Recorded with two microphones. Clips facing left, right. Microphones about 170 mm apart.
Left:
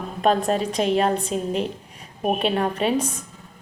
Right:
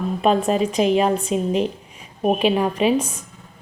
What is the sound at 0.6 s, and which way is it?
Speech, 35° left (ahead or behind).